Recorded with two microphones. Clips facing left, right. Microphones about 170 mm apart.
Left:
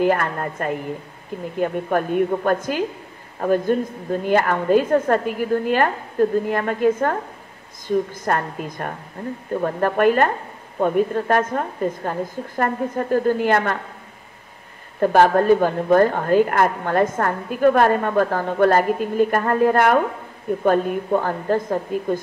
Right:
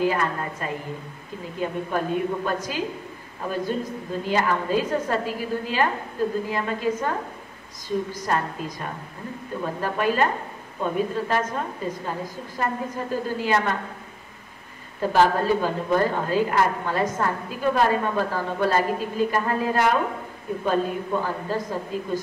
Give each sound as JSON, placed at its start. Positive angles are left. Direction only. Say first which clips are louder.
{"t": 0.0, "sound": "a woman's voice", "louder": "left 4 dB", "side_deg": 55}
{"t": 15.0, "sound": "a woman's voice", "louder": "left 5 dB", "side_deg": 55}